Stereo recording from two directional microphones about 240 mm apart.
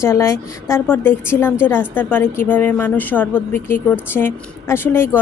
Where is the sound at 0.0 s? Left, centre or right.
Centre.